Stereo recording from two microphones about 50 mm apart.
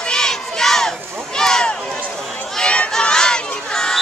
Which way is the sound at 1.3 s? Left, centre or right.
Centre.